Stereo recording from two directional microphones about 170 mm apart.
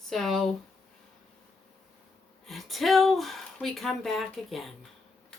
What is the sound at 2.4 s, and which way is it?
Speech, centre (ahead or behind).